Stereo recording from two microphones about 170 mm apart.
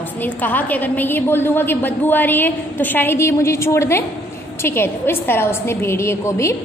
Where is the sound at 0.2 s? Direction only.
10° left (ahead or behind).